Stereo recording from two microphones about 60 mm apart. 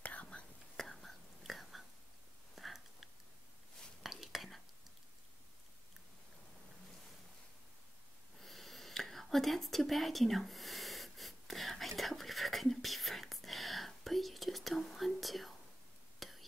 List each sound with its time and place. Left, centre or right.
0.0 s whispering: left
0.7 s whispering: centre
2.5 s a sound: centre
4.0 s whispering: centre
8.4 s a sound: centre
16.2 s whispering: centre